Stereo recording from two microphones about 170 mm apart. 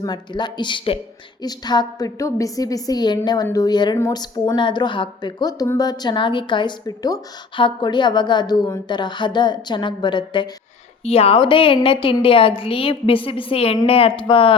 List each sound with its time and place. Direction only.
0.0 s a woman's voice: 25° left (ahead or behind)